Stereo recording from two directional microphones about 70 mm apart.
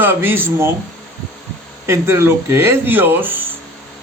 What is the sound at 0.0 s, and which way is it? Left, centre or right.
Speech, right.